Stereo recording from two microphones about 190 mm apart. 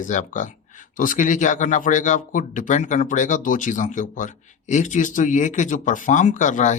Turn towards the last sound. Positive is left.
turn(degrees=40)  # may be behind; listen again after turning